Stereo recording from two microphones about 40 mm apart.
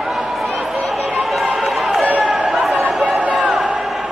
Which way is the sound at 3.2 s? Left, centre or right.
Right.